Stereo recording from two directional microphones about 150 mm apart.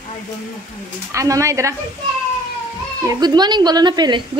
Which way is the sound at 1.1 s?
20° right (ahead or behind).